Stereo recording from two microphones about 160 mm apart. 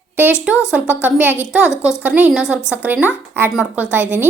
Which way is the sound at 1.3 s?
15° left (ahead or behind).